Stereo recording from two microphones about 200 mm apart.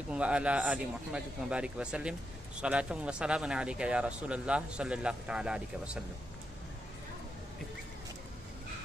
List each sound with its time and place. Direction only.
0.1 s speech: 5° right (ahead or behind)